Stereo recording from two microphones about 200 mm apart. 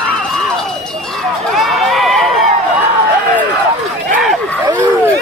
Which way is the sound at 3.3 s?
10° right (ahead or behind).